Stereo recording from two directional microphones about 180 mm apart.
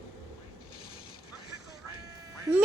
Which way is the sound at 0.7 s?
30° left (ahead or behind).